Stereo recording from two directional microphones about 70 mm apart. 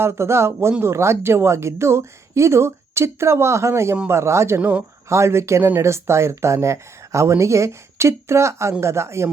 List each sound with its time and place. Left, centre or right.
0.0 s a woman's voice: right